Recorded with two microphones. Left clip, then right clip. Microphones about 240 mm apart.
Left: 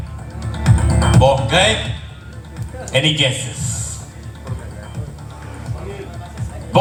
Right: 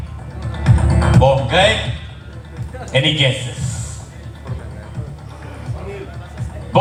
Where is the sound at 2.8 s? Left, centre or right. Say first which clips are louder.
Even; left.